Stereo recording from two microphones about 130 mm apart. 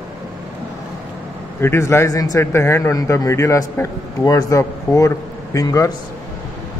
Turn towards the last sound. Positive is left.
turn(degrees=25)  # may be behind; listen again after turning